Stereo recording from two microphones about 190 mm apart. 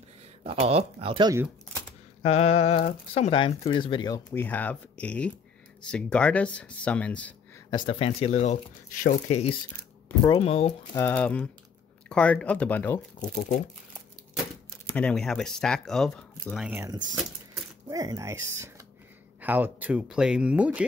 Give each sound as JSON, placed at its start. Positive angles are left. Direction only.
{"t": 0.4, "sound": "speech", "side_deg": -30}
{"t": 2.2, "sound": "speech", "side_deg": 35}
{"t": 4.3, "sound": "speech", "side_deg": 10}
{"t": 7.7, "sound": "speech", "side_deg": 25}
{"t": 9.7, "sound": "a sound", "side_deg": 15}
{"t": 10.3, "sound": "speech", "side_deg": 30}
{"t": 11.0, "sound": "speech", "side_deg": 10}
{"t": 15.0, "sound": "speech", "side_deg": 5}
{"t": 16.6, "sound": "speech", "side_deg": -15}